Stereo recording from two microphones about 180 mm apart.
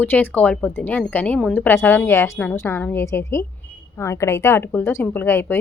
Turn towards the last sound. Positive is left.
turn(degrees=10)  # may be behind; listen again after turning